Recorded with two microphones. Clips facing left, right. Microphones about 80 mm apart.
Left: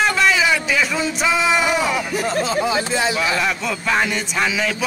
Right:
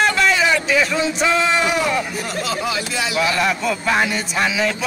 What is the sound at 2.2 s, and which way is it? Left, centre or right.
Speech, left.